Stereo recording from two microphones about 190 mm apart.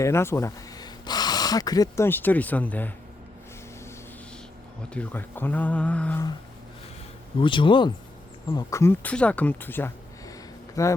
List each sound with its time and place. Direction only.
0.0 s speech: 15° left (ahead or behind)
4.9 s speech: 10° left (ahead or behind)
7.3 s speech: 25° left (ahead or behind)